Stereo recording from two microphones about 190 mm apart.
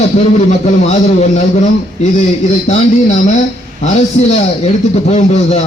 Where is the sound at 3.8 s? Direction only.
35° left (ahead or behind).